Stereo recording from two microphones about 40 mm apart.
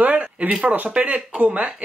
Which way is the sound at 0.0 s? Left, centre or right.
Right.